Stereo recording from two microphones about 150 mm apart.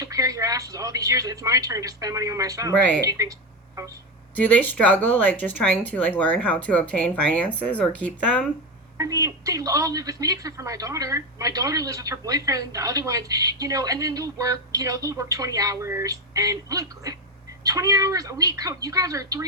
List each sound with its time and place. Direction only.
0.0 s a woman's voice: 25° right (ahead or behind)
4.4 s speech: 10° left (ahead or behind)
9.0 s a woman's voice: 20° right (ahead or behind)